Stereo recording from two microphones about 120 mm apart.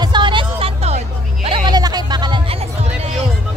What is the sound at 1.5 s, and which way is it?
Music, 40° right (ahead or behind).